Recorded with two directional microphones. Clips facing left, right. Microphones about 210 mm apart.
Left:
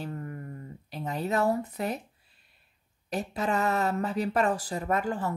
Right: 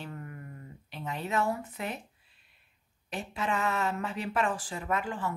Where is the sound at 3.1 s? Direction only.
40° left (ahead or behind).